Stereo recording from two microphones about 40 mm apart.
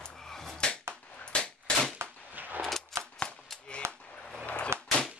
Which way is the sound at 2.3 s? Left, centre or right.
Right.